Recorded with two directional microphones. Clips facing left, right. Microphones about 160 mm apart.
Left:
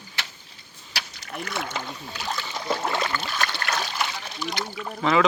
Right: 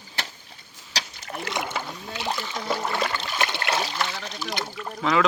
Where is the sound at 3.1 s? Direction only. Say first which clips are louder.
Right 1 dB; 20° right (ahead or behind).